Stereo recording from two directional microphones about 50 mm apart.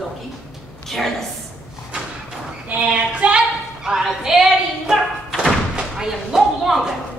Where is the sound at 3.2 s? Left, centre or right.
Right.